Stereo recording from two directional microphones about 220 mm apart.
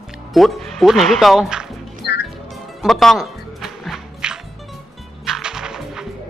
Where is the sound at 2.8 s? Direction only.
Centre (ahead or behind).